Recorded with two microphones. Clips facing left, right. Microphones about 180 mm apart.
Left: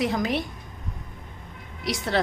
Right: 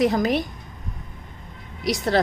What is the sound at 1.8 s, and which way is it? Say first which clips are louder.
Speech: right 5 dB; 40° right (ahead or behind).